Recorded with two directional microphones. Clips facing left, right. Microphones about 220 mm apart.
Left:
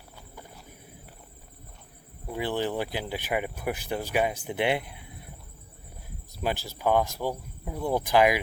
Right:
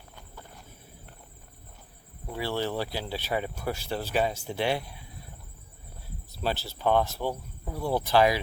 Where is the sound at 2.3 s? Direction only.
15° left (ahead or behind).